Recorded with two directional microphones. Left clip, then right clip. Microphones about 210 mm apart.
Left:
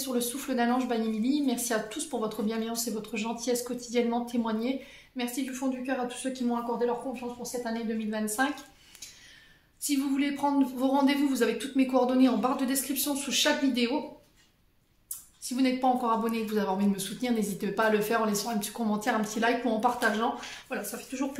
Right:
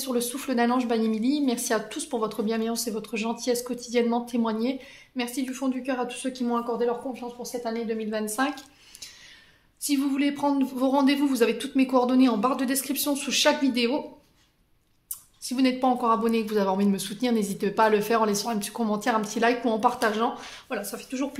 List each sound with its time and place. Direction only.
0.0 s a woman's voice: 50° right (ahead or behind)
7.6 s a woman's voice: 50° right (ahead or behind)
15.4 s a woman's voice: 50° right (ahead or behind)